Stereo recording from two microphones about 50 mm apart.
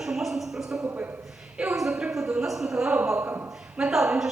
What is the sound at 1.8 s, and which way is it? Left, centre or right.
A woman's voice, centre.